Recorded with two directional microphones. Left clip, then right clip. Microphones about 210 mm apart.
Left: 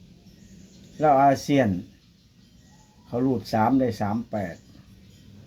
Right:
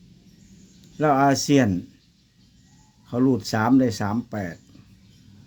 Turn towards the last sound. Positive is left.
turn(degrees=-45)  # may be behind; listen again after turning